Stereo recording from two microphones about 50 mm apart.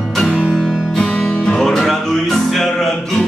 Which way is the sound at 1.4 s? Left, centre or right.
Centre.